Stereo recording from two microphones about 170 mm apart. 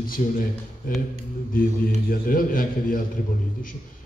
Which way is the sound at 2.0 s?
55° left (ahead or behind).